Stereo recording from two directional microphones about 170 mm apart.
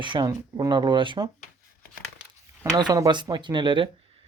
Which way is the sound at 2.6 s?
20° right (ahead or behind).